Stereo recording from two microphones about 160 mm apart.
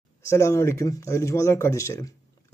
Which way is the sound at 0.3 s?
20° left (ahead or behind).